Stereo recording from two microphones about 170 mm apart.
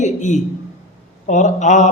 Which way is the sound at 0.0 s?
45° left (ahead or behind).